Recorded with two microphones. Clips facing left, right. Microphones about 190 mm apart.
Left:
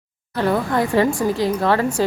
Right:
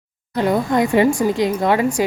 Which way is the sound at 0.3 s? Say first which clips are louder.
Right 2 dB; 15° right (ahead or behind).